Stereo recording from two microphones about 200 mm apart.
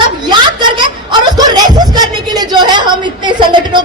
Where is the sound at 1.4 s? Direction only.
20° right (ahead or behind).